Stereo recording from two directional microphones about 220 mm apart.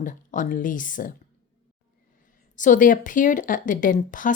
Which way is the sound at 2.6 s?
35° left (ahead or behind).